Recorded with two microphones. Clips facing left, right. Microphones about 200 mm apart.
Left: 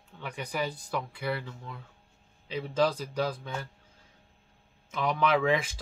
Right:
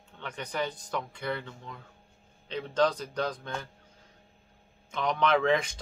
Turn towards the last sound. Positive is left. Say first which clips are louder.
# right 1 dB
turn(degrees=5)  # may be behind; listen again after turning